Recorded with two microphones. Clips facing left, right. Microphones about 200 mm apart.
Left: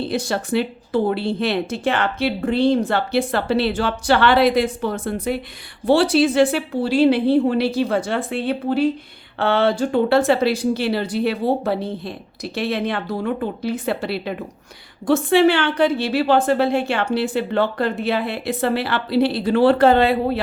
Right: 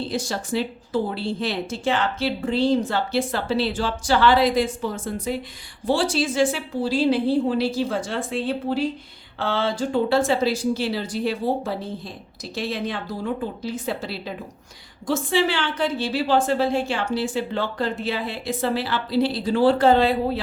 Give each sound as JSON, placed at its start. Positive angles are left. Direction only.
{"t": 0.0, "sound": "speech", "side_deg": 60}